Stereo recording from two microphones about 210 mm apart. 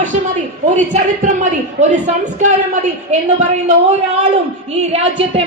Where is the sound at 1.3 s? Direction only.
35° right (ahead or behind).